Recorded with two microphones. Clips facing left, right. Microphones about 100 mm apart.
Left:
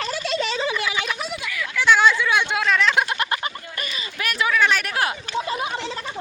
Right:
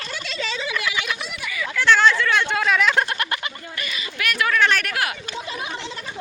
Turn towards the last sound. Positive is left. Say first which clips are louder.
# left 2 dB
turn(degrees=25)  # may be behind; listen again after turning